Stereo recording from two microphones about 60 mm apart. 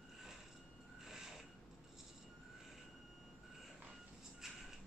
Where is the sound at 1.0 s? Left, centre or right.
Centre.